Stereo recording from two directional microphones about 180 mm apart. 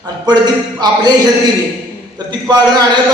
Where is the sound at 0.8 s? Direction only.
25° right (ahead or behind).